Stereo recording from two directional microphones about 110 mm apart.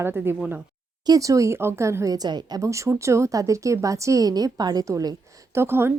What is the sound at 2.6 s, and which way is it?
A woman's voice, 30° right (ahead or behind).